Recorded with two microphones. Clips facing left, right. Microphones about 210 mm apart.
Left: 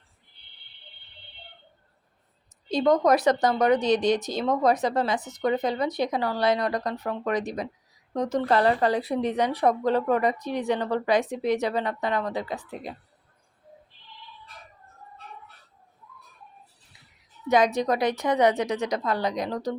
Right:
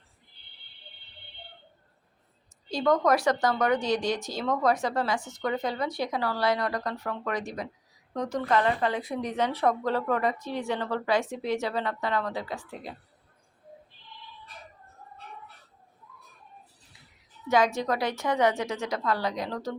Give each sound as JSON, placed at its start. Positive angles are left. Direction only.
{"t": 2.6, "sound": "speech", "side_deg": 20}
{"t": 8.4, "sound": "a woman's voice", "side_deg": 35}
{"t": 9.3, "sound": "speech", "side_deg": 15}
{"t": 17.5, "sound": "speech", "side_deg": 20}